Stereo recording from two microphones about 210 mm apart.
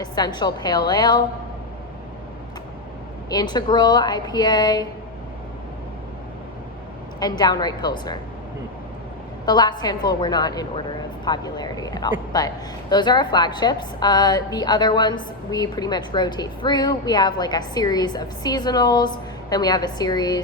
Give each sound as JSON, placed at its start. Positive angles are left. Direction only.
{"t": 0.0, "sound": "a woman's voice", "side_deg": 20}
{"t": 3.2, "sound": "a woman's voice", "side_deg": 20}
{"t": 7.2, "sound": "a woman's voice", "side_deg": 20}
{"t": 9.5, "sound": "a woman's voice", "side_deg": 20}